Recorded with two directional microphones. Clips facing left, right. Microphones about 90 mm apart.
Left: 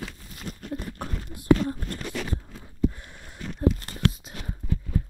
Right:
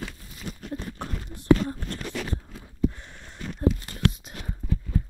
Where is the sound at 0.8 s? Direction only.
10° left (ahead or behind).